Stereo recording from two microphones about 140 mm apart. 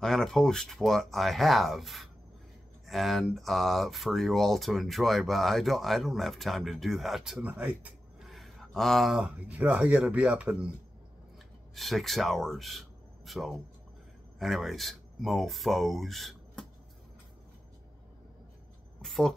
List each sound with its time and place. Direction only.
0.0 s speech: 5° left (ahead or behind)
18.9 s a woman's voice: centre (ahead or behind)